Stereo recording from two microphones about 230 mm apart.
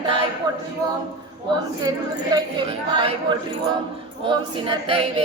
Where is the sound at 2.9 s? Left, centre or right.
Right.